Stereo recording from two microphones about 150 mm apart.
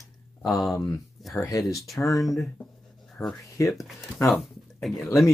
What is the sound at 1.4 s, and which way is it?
Speech, 25° left (ahead or behind).